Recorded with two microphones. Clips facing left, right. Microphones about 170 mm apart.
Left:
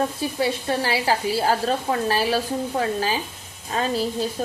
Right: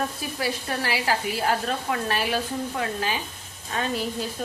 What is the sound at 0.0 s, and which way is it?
A woman's voice, 25° left (ahead or behind).